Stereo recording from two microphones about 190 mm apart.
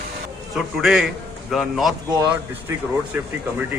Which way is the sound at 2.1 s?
20° right (ahead or behind).